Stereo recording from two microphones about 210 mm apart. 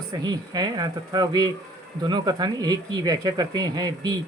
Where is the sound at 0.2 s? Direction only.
20° right (ahead or behind).